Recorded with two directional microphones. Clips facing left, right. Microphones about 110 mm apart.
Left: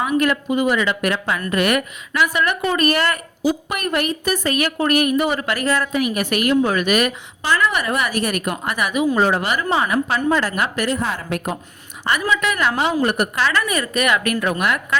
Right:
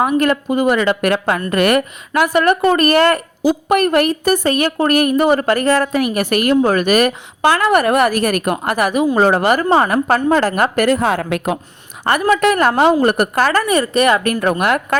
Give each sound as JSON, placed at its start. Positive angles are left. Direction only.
{"t": 0.0, "sound": "a woman's voice", "side_deg": -40}
{"t": 10.9, "sound": "a woman's voice", "side_deg": -75}
{"t": 12.0, "sound": "a woman's voice", "side_deg": -50}
{"t": 13.7, "sound": "a woman's voice", "side_deg": -30}
{"t": 14.6, "sound": "a woman's voice", "side_deg": -50}